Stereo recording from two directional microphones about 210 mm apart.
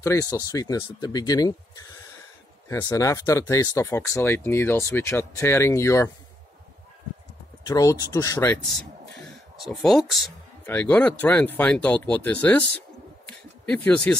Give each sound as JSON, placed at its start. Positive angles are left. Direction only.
{"t": 0.0, "sound": "speech", "side_deg": 15}
{"t": 2.7, "sound": "speech", "side_deg": 15}
{"t": 7.6, "sound": "speech", "side_deg": 15}
{"t": 9.6, "sound": "speech", "side_deg": 0}